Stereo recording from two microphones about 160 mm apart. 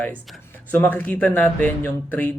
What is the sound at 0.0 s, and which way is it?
Speech, 10° left (ahead or behind).